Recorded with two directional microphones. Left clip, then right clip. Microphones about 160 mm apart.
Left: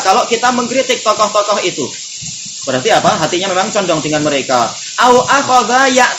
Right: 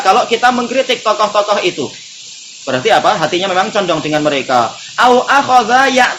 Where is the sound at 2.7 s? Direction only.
30° right (ahead or behind).